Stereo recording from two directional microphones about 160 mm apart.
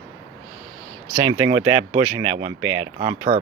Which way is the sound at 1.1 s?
30° right (ahead or behind).